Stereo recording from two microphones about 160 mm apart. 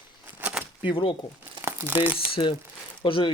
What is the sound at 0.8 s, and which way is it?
Speech, 35° left (ahead or behind).